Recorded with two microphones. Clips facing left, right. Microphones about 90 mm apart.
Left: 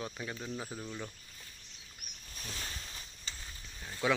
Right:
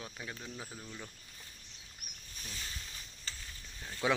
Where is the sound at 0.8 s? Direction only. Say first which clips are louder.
Left 5 dB; 15° left (ahead or behind).